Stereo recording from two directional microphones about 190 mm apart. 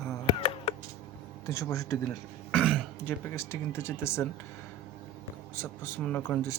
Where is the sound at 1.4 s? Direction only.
15° left (ahead or behind).